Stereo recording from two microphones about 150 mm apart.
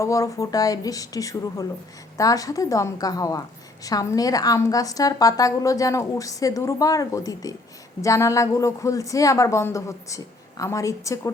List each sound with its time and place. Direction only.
0.0 s a woman's voice: 20° left (ahead or behind)